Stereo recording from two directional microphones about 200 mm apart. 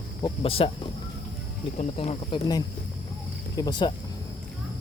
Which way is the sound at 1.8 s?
30° left (ahead or behind).